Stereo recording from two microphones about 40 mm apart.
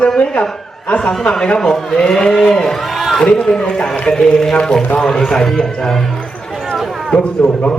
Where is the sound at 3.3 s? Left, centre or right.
Left; by 6.2 s centre.